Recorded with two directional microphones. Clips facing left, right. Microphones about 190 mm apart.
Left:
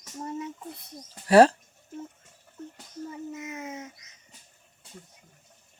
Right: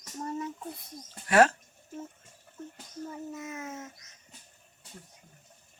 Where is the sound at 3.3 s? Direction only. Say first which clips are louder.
Left 2 dB; 20° left (ahead or behind).